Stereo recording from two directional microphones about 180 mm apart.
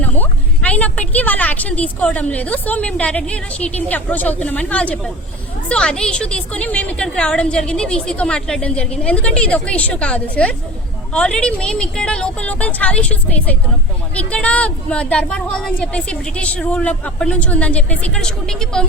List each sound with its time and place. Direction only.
0.0 s a woman's voice: 10° left (ahead or behind)